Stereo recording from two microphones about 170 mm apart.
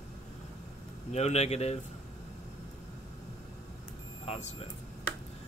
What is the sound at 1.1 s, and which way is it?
Speech, 40° left (ahead or behind).